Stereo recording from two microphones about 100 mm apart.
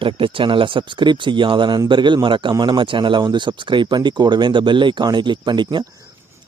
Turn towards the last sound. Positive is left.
turn(degrees=-50)  # may be behind; listen again after turning